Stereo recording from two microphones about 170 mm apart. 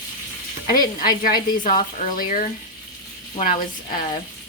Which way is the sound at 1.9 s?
50° left (ahead or behind).